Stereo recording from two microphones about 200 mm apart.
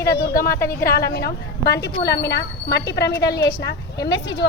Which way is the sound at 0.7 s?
50° left (ahead or behind).